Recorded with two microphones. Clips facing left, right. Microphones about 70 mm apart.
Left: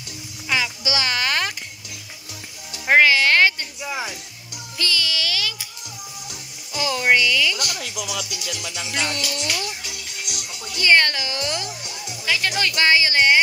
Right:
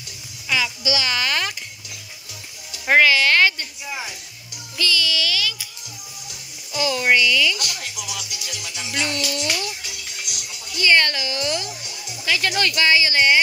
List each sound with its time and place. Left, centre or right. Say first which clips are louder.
0.5 s a sound: right 1 dB; left
2.9 s music: even; left
4.7 s music: right 2 dB; left
6.7 s a sound: even; left
7.9 s music: left 4 dB; left
8.9 s speech: right 2 dB; left
10.2 s music: left 2 dB; left
10.9 s music: left 1 dB; left
12.3 s speech: right 1 dB; centre
12.7 s speech: left 2 dB; left